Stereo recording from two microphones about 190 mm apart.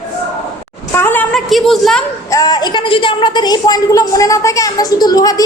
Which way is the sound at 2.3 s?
20° left (ahead or behind).